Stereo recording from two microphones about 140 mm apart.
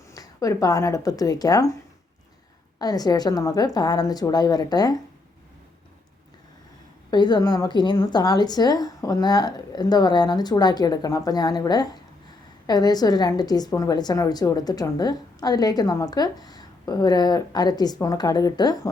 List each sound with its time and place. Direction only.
0.1 s speech: 25° left (ahead or behind)
2.7 s a woman's voice: 25° left (ahead or behind)
7.1 s a woman's voice: 30° left (ahead or behind)